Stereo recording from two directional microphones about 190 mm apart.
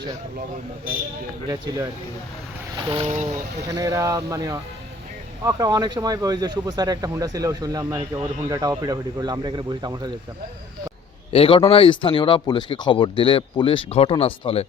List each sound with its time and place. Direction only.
1.5 s speech: 20° right (ahead or behind)
11.3 s speech: 30° left (ahead or behind)